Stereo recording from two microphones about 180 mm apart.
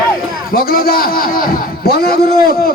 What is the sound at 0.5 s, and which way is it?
A man's voice, 55° left (ahead or behind).